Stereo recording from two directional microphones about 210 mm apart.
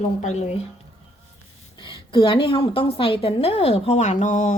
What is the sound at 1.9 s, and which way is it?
A woman's voice, 25° left (ahead or behind).